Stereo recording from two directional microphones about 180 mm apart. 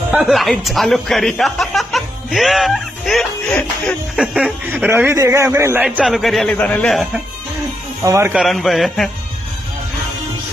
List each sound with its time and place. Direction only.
0.1 s speech: 5° right (ahead or behind)
8.0 s speech: 15° right (ahead or behind)
8.3 s speech: centre (ahead or behind)